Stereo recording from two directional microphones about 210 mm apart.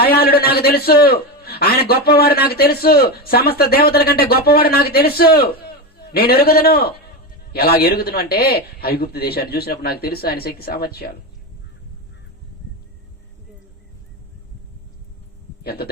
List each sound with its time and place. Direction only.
0.0 s a man's voice: 45° left (ahead or behind)
15.6 s a man's voice: 45° left (ahead or behind)